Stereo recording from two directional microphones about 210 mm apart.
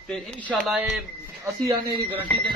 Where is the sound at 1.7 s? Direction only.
10° right (ahead or behind).